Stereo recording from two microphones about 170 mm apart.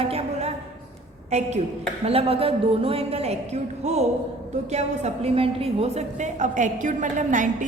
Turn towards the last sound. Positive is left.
turn(degrees=-45)  # may be behind; listen again after turning